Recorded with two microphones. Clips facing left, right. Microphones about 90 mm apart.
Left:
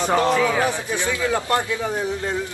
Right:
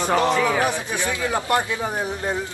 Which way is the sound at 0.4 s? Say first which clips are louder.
Even; 15° right (ahead or behind).